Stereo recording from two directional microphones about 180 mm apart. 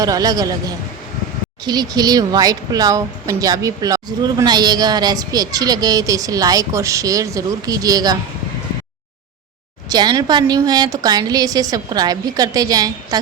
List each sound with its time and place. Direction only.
0.0 s a woman's voice: 20° right (ahead or behind)
1.6 s a woman's voice: 25° right (ahead or behind)
9.9 s a woman's voice: 20° right (ahead or behind)